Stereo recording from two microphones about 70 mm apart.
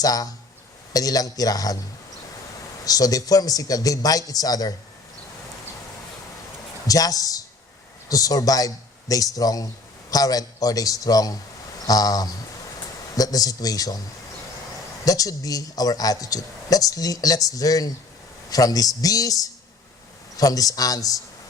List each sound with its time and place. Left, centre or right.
0.0 s speech: left
2.8 s speech: left
6.8 s a woman's voice: left
15.0 s speech: left